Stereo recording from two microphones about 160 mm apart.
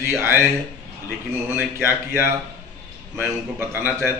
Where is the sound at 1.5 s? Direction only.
15° right (ahead or behind).